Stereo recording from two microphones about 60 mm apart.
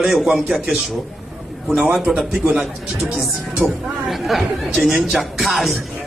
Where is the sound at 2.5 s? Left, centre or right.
Right.